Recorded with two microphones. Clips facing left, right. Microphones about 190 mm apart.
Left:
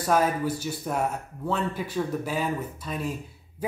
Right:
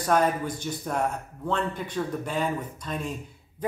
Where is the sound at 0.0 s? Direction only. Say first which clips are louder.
Even; 5° left (ahead or behind).